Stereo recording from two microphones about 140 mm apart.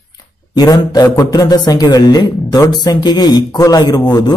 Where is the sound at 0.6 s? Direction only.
30° left (ahead or behind).